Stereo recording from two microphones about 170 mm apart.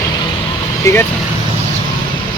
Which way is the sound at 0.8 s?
15° left (ahead or behind).